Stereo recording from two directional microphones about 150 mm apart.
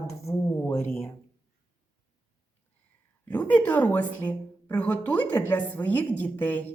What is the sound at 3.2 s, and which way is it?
A woman's voice, 10° left (ahead or behind).